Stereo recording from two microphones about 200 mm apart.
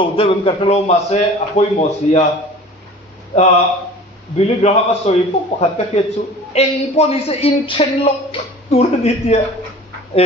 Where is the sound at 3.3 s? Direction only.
30° left (ahead or behind).